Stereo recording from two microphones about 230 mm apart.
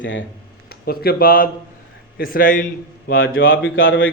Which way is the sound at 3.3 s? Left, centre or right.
Left.